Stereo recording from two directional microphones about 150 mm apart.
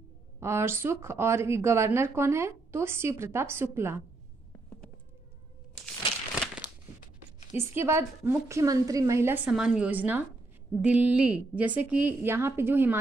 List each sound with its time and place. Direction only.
0.4 s speech: 15° right (ahead or behind)
7.5 s speech: 15° right (ahead or behind)